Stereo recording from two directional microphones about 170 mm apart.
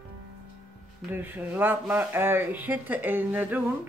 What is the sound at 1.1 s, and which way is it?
Speech, 10° right (ahead or behind).